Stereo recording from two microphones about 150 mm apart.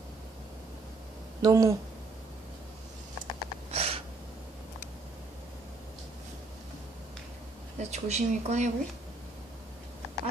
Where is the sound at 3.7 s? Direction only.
40° right (ahead or behind).